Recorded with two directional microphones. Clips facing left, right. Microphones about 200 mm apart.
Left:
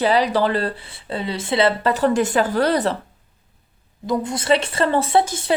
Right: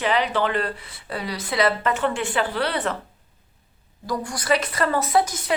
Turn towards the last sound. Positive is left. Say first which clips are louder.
# left 3 dB
turn(degrees=30)  # may be behind; listen again after turning